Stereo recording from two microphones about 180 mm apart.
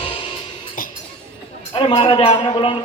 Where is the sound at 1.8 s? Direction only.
30° left (ahead or behind).